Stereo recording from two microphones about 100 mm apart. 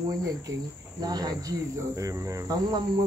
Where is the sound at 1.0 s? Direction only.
40° right (ahead or behind).